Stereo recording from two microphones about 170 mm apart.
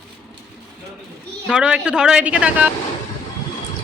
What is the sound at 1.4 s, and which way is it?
A woman's voice, 5° right (ahead or behind).